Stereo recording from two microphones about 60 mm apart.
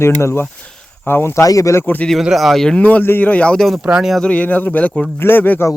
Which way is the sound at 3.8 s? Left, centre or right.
Right.